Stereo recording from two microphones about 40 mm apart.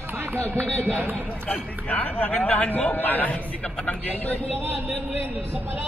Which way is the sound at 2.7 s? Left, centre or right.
Left.